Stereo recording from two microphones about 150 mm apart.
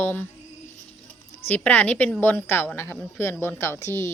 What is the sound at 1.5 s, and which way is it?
A woman's voice, 10° left (ahead or behind).